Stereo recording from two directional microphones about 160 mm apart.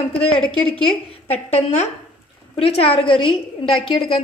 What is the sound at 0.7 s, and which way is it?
A woman's voice, 35° left (ahead or behind).